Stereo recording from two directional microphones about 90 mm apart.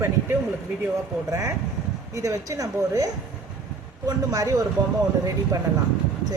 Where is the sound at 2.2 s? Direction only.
35° right (ahead or behind).